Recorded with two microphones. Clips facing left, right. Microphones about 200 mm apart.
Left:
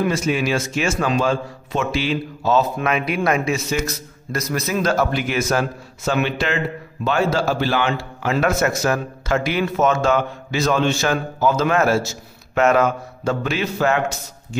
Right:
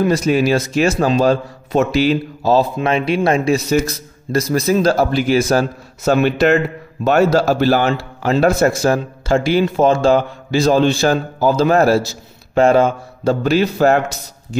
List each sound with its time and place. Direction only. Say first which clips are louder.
0.0 s a man's voice: right 5 dB; 35° right (ahead or behind)